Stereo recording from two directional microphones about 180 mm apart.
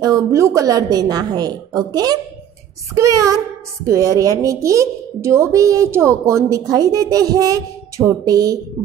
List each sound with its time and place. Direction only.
0.0 s a woman's voice: 20° right (ahead or behind)
2.9 s a woman's voice: 15° right (ahead or behind)